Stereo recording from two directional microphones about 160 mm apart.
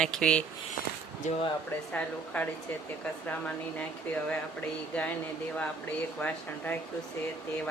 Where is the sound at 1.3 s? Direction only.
45° left (ahead or behind).